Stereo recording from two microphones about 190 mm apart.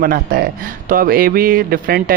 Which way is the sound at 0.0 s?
50° right (ahead or behind).